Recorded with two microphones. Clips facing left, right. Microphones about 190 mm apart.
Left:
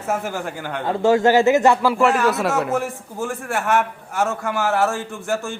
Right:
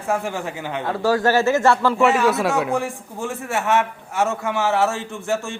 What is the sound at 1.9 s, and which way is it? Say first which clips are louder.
A man's voice: even; centre (ahead or behind).